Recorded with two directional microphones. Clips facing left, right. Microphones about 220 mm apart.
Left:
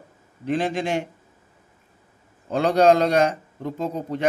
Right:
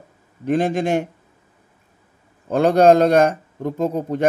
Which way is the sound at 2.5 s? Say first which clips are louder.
Right 4 dB; 50° right (ahead or behind).